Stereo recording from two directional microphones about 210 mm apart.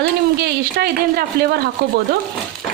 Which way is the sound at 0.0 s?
50° right (ahead or behind).